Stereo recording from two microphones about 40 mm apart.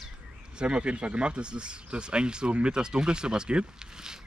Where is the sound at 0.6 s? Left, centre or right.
Right.